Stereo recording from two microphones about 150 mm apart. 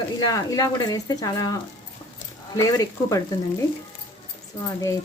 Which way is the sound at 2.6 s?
20° left (ahead or behind).